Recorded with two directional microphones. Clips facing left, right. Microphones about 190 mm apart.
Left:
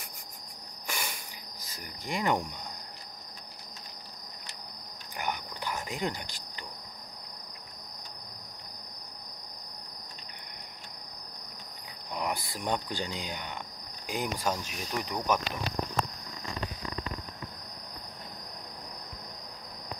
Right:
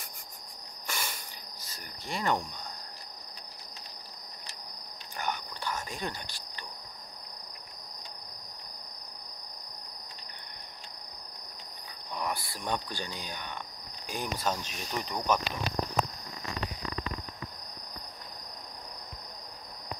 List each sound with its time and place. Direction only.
0.8 s cricket: 10° left (ahead or behind)
1.7 s insect: 15° left (ahead or behind)
5.2 s cricket: 15° left (ahead or behind)
12.2 s speech: 20° left (ahead or behind)